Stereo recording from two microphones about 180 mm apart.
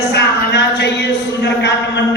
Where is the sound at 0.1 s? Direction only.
70° left (ahead or behind).